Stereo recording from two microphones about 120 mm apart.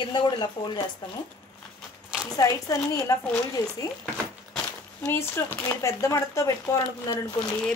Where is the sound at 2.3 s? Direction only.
30° left (ahead or behind).